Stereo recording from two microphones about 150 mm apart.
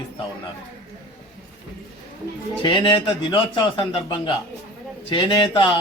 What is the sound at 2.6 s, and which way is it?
A man's voice, 35° left (ahead or behind).